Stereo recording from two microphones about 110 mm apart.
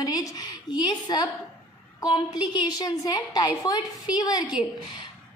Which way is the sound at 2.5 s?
35° left (ahead or behind).